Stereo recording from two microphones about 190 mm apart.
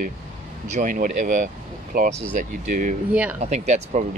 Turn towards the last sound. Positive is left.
turn(degrees=-35)  # may be behind; listen again after turning